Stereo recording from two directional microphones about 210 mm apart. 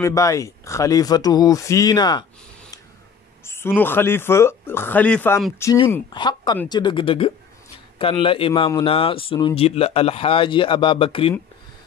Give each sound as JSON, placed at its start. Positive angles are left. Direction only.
{"t": 0.0, "sound": "speech", "side_deg": 15}
{"t": 3.4, "sound": "a man's voice", "side_deg": 10}